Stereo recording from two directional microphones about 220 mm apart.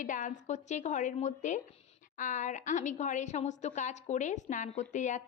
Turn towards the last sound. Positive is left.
turn(degrees=35)  # may be behind; listen again after turning